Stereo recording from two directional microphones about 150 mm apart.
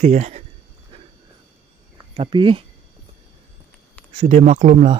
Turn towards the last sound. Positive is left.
turn(degrees=-55)  # may be behind; listen again after turning